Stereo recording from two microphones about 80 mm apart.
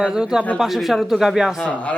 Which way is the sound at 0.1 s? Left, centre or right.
Centre.